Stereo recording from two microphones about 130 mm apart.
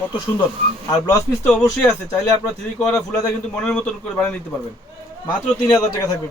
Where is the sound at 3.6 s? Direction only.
10° left (ahead or behind).